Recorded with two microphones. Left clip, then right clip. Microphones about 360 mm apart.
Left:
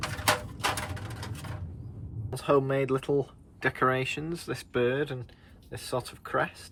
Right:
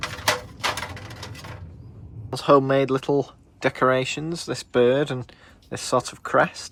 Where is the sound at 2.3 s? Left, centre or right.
Centre.